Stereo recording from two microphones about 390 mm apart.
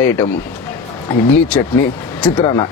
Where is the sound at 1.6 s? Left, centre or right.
Centre.